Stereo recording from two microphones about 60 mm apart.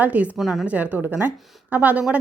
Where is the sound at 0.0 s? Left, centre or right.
Right.